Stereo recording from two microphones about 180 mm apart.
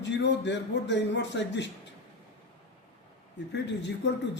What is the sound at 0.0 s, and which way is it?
A man's voice, 75° left (ahead or behind).